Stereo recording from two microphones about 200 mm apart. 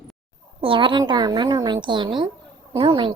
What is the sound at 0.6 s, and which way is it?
A woman's voice, 25° right (ahead or behind).